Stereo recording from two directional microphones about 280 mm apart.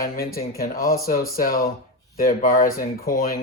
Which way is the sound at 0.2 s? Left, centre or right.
Left.